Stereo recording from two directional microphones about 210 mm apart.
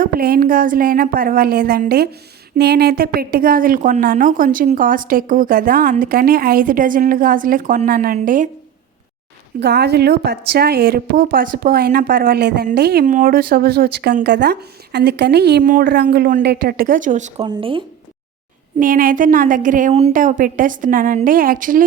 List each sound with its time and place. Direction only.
0.0 s a woman's voice: 45° right (ahead or behind)
9.6 s speech: 50° right (ahead or behind); by 17.3 s 35° right (ahead or behind)
17.3 s speech: 20° right (ahead or behind)
18.8 s a woman's voice: 40° right (ahead or behind)